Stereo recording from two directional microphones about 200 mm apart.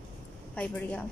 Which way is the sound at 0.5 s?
5° left (ahead or behind).